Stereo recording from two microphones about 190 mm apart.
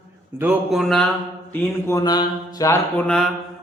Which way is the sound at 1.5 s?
15° left (ahead or behind).